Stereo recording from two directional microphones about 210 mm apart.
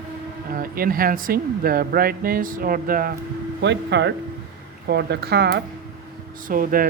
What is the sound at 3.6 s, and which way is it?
Speech, 55° right (ahead or behind).